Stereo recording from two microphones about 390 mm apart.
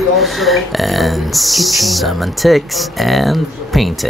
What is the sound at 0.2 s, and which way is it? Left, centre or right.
Speech, centre.